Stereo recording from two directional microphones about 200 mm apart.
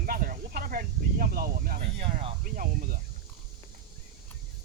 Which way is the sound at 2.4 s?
45° right (ahead or behind).